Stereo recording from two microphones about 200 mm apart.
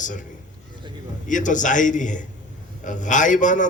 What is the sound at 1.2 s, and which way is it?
A man's voice, 40° left (ahead or behind).